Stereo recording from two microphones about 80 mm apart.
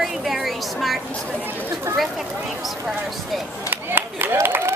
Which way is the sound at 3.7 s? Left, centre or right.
Right.